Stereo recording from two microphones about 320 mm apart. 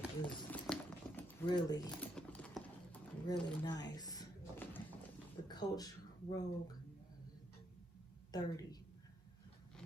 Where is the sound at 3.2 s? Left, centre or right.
Centre.